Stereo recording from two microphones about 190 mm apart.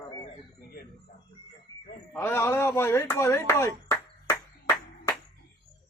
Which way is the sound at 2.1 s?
15° left (ahead or behind).